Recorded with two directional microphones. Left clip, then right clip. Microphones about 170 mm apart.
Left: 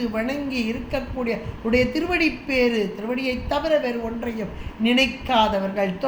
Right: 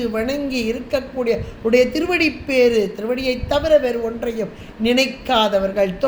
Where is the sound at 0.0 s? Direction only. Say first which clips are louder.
Right 4 dB; 60° right (ahead or behind).